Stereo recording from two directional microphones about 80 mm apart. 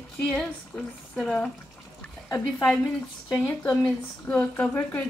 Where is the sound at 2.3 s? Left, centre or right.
Left.